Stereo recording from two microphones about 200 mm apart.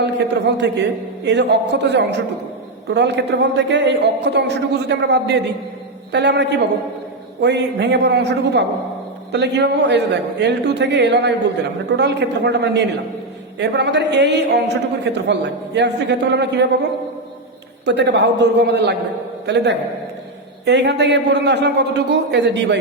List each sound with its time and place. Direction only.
0.0 s a man's voice: 60° right (ahead or behind)
17.8 s a man's voice: 60° right (ahead or behind)